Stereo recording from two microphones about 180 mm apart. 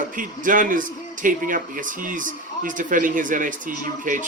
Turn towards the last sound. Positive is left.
turn(degrees=-45)  # may be behind; listen again after turning